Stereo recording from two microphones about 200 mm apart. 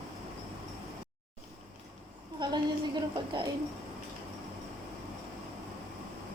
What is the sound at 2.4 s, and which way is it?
A woman's voice, 20° right (ahead or behind).